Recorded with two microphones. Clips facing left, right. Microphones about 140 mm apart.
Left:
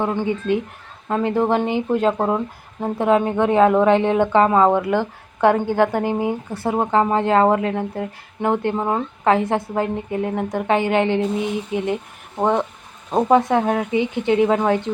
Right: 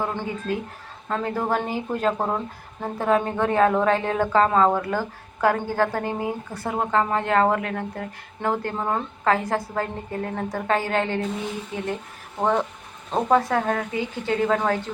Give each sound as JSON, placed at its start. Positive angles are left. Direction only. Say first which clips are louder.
{"t": 0.0, "sound": "speech", "louder": "left 6 dB", "side_deg": 20}